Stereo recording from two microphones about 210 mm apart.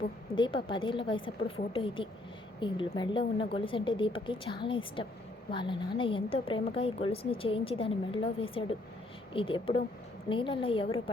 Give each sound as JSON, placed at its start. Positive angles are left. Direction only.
{"t": 0.3, "sound": "a woman's voice", "side_deg": 20}